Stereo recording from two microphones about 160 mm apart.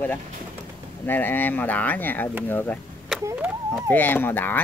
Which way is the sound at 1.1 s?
10° left (ahead or behind).